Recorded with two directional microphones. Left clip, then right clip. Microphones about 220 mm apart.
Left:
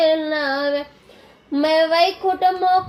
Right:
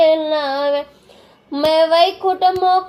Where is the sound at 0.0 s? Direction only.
10° right (ahead or behind).